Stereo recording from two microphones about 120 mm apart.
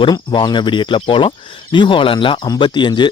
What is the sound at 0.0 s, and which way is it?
Speech, 40° left (ahead or behind).